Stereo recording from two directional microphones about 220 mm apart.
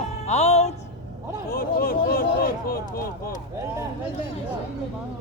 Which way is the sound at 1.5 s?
40° left (ahead or behind).